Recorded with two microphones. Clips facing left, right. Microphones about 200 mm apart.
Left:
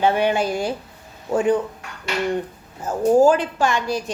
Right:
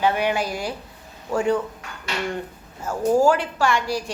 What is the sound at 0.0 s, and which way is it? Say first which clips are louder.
A woman's voice: left 3 dB; 25° left (ahead or behind).